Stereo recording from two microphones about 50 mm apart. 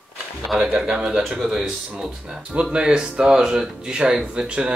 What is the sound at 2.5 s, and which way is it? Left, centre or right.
Speech, centre.